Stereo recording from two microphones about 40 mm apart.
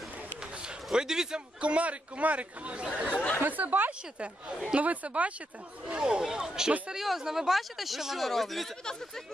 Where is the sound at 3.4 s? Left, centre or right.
Right.